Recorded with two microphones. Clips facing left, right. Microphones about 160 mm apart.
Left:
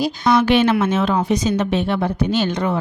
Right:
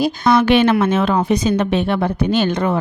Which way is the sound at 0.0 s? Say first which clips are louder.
Right 2 dB; 55° right (ahead or behind).